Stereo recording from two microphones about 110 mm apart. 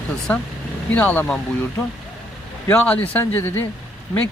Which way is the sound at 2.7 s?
15° left (ahead or behind).